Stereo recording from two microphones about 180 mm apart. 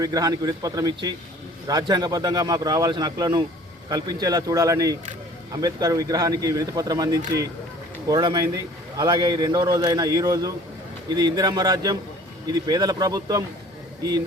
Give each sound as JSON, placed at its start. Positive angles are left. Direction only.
{"t": 0.0, "sound": "a man's voice", "side_deg": -20}